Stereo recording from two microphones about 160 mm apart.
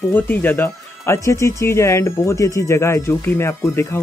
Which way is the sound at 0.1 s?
10° left (ahead or behind).